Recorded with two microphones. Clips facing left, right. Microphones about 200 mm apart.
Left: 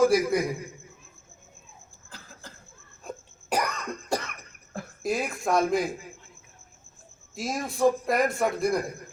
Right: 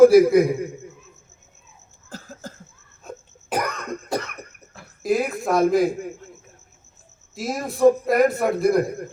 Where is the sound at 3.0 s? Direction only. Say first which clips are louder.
Right 1 dB; centre (ahead or behind).